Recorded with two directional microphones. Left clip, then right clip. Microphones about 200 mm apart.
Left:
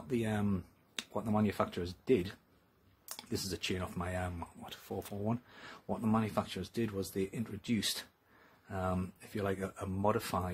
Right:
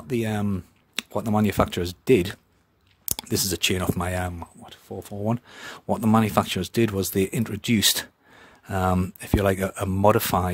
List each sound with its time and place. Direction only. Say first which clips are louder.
0.1 s speech: right 9 dB; 35° right (ahead or behind)
4.3 s speech: right 6 dB; 20° right (ahead or behind)
5.2 s speech: right 11 dB; 40° right (ahead or behind)